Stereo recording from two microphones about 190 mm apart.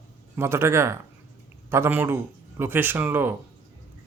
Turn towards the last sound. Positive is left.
turn(degrees=-10)  # may be behind; listen again after turning